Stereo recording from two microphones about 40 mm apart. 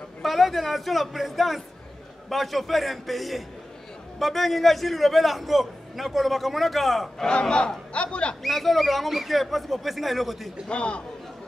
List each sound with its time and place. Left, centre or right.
0.2 s a man's voice: centre
7.2 s a man's voice: left
8.4 s a man's voice: centre
10.7 s speech: left